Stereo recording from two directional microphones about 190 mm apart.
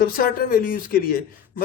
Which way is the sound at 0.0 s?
50° left (ahead or behind).